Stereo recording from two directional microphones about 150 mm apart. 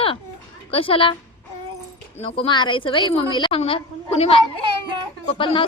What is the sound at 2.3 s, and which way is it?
A woman's voice, 35° left (ahead or behind).